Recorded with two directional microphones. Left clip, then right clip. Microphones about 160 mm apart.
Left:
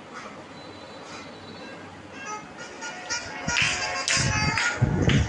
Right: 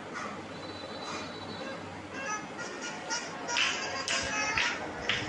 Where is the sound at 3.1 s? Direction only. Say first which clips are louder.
Left 6 dB; 45° left (ahead or behind).